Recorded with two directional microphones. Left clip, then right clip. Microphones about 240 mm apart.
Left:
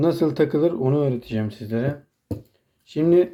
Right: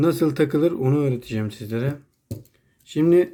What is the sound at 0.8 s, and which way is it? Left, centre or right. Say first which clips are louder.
Speech: left 1 dB; right.